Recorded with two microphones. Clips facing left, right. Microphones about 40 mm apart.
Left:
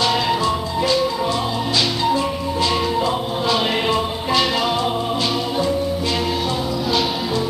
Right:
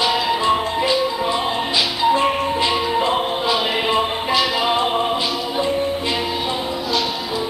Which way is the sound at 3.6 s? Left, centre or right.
Centre.